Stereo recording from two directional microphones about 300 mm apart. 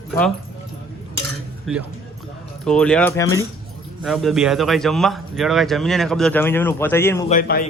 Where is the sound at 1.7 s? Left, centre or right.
Centre.